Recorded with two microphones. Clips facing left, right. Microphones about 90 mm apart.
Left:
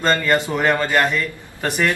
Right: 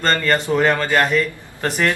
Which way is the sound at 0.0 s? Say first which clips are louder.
Left 1 dB; 10° left (ahead or behind).